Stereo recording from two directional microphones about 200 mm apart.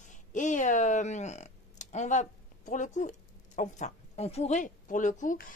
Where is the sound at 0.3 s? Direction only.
40° left (ahead or behind).